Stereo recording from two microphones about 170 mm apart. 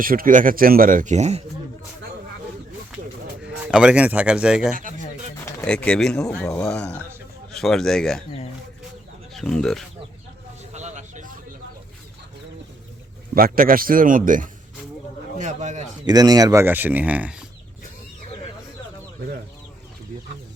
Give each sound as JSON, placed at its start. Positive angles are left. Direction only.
{"t": 0.0, "sound": "speech", "side_deg": -55}
{"t": 3.4, "sound": "speech", "side_deg": -5}
{"t": 4.7, "sound": "speech", "side_deg": -50}
{"t": 5.6, "sound": "speech", "side_deg": 5}
{"t": 9.3, "sound": "speech", "side_deg": 5}
{"t": 10.7, "sound": "a sound", "side_deg": -45}
{"t": 13.3, "sound": "a man's voice", "side_deg": -60}
{"t": 16.0, "sound": "speech", "side_deg": -25}